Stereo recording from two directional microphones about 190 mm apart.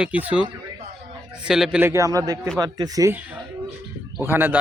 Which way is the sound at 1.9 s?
15° right (ahead or behind).